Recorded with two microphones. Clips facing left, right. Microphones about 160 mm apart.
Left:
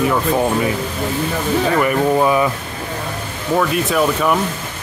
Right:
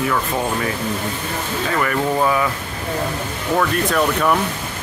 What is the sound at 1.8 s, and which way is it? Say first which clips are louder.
Speech: left 4 dB; 20° left (ahead or behind).